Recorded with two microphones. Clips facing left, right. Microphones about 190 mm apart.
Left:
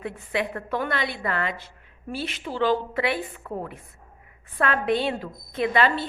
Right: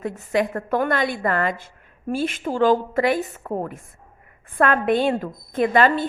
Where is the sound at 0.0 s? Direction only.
45° right (ahead or behind).